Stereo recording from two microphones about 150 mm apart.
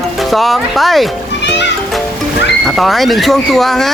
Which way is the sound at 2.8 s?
Centre (ahead or behind).